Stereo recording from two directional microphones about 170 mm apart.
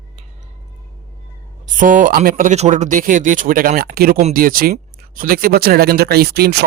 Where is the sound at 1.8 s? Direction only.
50° right (ahead or behind).